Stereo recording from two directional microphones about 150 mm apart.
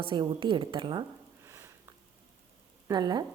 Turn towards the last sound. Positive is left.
turn(degrees=-30)  # may be behind; listen again after turning